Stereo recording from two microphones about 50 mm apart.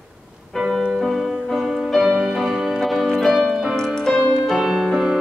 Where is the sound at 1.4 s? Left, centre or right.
Centre.